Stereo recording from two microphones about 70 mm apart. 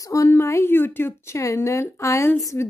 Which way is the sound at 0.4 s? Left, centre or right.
Left.